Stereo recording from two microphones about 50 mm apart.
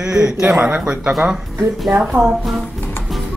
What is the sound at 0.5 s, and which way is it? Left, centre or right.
Speech, right.